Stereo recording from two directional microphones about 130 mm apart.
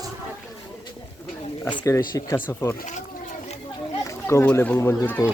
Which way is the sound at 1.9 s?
25° left (ahead or behind).